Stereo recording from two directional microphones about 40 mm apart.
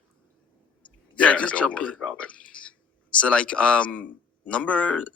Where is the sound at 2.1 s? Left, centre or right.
Left.